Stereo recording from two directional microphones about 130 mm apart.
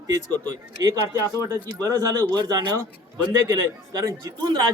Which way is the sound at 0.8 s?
30° right (ahead or behind).